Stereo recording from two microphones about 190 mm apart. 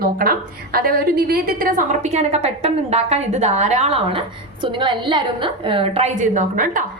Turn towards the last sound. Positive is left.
turn(degrees=-45)  # may be behind; listen again after turning